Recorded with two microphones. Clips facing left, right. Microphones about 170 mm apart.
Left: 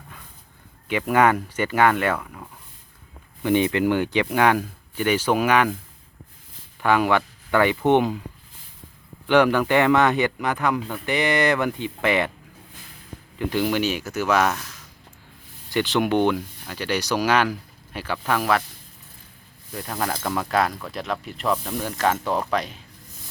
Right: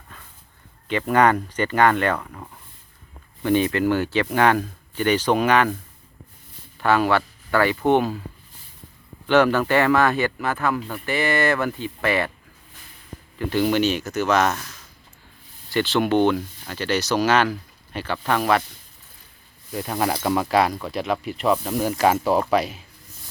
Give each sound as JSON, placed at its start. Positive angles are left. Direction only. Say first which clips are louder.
{"t": 0.9, "sound": "speech", "louder": "right 1 dB", "side_deg": 10}
{"t": 3.4, "sound": "speech", "louder": "even", "side_deg": 15}
{"t": 6.8, "sound": "speech", "louder": "even", "side_deg": 15}
{"t": 9.2, "sound": "speech", "louder": "even", "side_deg": 15}
{"t": 13.6, "sound": "speech", "louder": "right 3 dB", "side_deg": 5}
{"t": 15.7, "sound": "speech", "louder": "right 1 dB", "side_deg": 15}
{"t": 19.7, "sound": "speech", "louder": "right 4 dB", "side_deg": -10}